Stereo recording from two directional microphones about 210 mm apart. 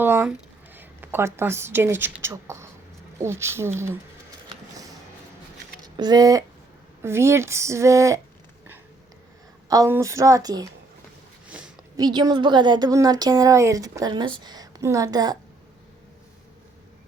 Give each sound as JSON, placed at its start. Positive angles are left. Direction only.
{"t": 0.0, "sound": "a woman's voice", "side_deg": -10}
{"t": 5.8, "sound": "speech", "side_deg": -20}
{"t": 9.6, "sound": "speech", "side_deg": -15}
{"t": 11.4, "sound": "a sound", "side_deg": -5}
{"t": 11.9, "sound": "a woman's voice", "side_deg": -20}